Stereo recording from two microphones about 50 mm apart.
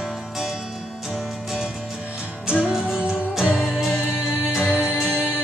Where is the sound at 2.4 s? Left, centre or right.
Centre.